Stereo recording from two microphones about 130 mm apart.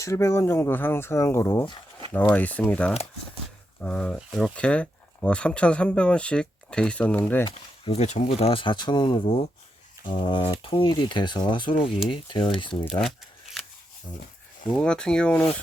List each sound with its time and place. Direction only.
0.0 s speech: 25° left (ahead or behind)
4.3 s speech: 5° right (ahead or behind)
4.5 s speech: 10° left (ahead or behind)
7.9 s speech: 55° left (ahead or behind); by 11.7 s 35° left (ahead or behind)
11.9 s speech: centre (ahead or behind)
12.1 s speech: 40° left (ahead or behind)
13.0 s shuffling cards: centre (ahead or behind)
14.8 s speech: 5° left (ahead or behind)